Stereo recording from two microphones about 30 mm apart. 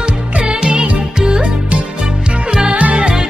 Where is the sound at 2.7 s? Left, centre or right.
Right.